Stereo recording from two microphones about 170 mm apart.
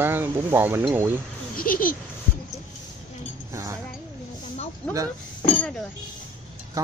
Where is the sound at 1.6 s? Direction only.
55° left (ahead or behind).